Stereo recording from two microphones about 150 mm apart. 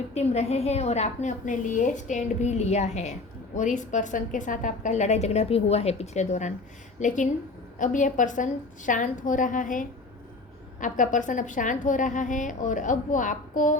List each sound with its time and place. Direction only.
0.1 s a woman's voice: 45° left (ahead or behind)